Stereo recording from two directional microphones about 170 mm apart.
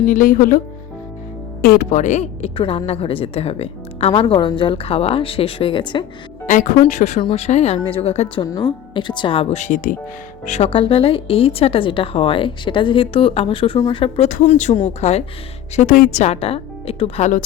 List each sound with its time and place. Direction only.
0.0 s speech: 55° left (ahead or behind)
1.6 s speech: 65° left (ahead or behind)
1.9 s speech: 45° left (ahead or behind)
2.6 s a woman's voice: 35° left (ahead or behind)
6.4 s a woman's voice: 50° left (ahead or behind)
8.4 s a woman's voice: 25° left (ahead or behind)
13.7 s speech: 20° left (ahead or behind)
14.0 s a woman's voice: 40° left (ahead or behind)
15.7 s a woman's voice: 45° left (ahead or behind)